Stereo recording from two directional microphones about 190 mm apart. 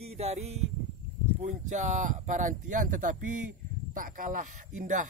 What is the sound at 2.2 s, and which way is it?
Speech, 40° right (ahead or behind).